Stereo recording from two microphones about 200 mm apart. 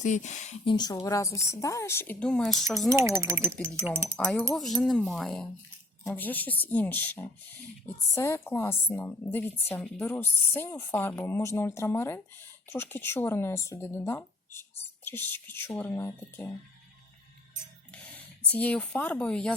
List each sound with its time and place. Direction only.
0.0 s a woman's voice: 35° left (ahead or behind); by 2.9 s centre (ahead or behind)
2.9 s speech: 15° right (ahead or behind)
4.5 s a woman's voice: centre (ahead or behind)
18.4 s a woman's voice: 5° left (ahead or behind)